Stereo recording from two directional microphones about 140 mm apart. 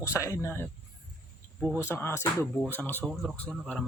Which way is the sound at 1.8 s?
15° left (ahead or behind).